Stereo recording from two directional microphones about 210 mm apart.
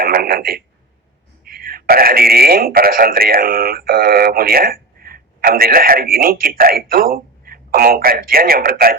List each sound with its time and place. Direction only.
0.0 s telephone: 45° right (ahead or behind)
1.5 s speech: 45° right (ahead or behind)